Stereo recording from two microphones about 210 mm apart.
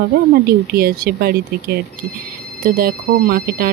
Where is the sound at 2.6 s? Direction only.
45° right (ahead or behind).